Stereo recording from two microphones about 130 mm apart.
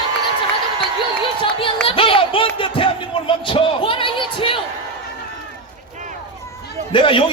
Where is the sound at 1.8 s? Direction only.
45° left (ahead or behind).